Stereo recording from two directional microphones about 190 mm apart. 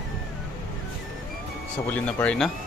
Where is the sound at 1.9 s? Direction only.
5° left (ahead or behind).